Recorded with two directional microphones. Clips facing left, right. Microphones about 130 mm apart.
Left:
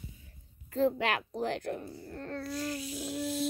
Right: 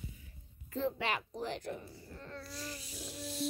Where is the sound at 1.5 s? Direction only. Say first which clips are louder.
Left 6 dB; 60° left (ahead or behind).